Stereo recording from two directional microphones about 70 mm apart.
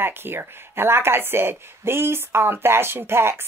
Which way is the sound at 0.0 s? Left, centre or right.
Right.